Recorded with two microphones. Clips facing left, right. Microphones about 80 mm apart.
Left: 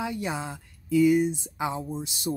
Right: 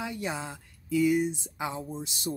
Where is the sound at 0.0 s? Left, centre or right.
Centre.